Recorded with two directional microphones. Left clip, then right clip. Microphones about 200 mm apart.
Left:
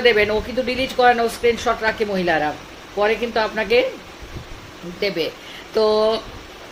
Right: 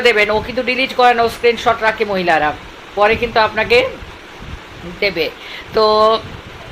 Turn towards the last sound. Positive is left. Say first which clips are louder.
# right 6 dB
turn(degrees=15)  # may be behind; listen again after turning